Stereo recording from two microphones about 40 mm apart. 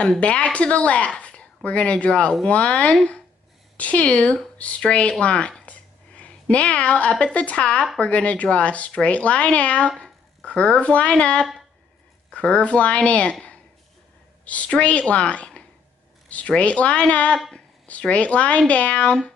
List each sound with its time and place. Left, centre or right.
0.2 s speech: left
5.7 s a sound: left
7.3 s a woman's voice: left